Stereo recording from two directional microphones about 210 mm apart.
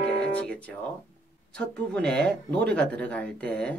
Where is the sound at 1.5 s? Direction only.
5° left (ahead or behind).